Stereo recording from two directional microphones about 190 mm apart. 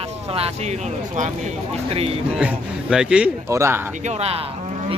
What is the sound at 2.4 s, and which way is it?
Speech, 5° right (ahead or behind).